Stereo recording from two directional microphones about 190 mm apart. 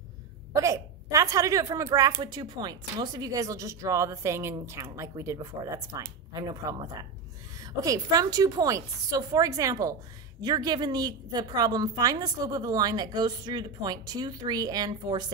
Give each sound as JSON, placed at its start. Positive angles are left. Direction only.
{"t": 0.5, "sound": "a woman's voice", "side_deg": -15}